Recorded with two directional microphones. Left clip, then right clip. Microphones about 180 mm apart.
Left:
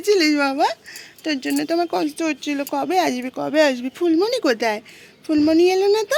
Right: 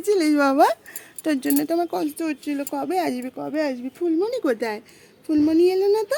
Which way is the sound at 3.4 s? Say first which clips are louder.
Left 10 dB; 10° left (ahead or behind).